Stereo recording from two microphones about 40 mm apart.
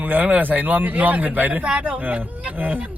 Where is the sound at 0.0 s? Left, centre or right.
Right.